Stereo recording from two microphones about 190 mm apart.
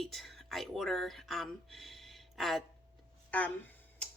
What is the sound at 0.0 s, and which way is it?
Speech, centre (ahead or behind).